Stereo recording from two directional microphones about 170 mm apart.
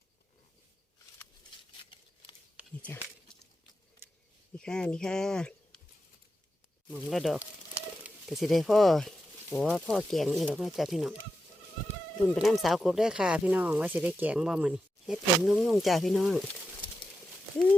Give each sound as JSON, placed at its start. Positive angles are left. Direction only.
{"t": 4.0, "sound": "a sound", "side_deg": -10}
{"t": 4.5, "sound": "speech", "side_deg": 5}
{"t": 6.9, "sound": "speech", "side_deg": 0}
{"t": 12.2, "sound": "speech", "side_deg": 0}